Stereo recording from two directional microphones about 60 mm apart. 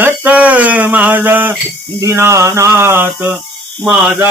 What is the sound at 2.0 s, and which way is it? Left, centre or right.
Mantra, right.